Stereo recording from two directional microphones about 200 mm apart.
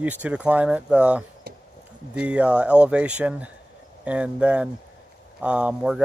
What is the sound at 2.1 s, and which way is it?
Speech, 5° right (ahead or behind).